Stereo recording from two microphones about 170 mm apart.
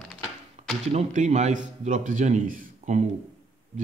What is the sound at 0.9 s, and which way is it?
A man's voice, 45° right (ahead or behind).